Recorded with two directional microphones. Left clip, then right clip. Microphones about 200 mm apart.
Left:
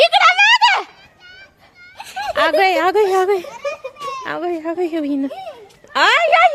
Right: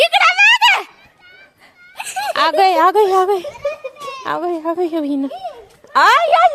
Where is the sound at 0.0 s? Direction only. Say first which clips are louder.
Even; 10° right (ahead or behind).